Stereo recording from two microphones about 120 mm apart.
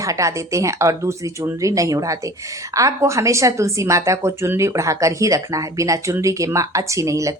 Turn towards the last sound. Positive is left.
turn(degrees=-25)  # may be behind; listen again after turning